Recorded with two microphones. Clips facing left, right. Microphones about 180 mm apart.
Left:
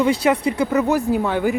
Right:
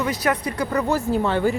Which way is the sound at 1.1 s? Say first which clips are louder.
Left 1 dB; 10° left (ahead or behind).